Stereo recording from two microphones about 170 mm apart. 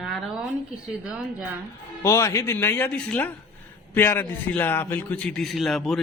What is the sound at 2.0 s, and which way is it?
A man's voice, 15° left (ahead or behind).